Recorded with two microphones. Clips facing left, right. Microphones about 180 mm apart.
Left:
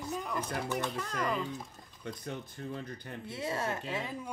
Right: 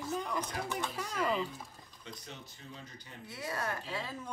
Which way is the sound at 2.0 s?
55° left (ahead or behind).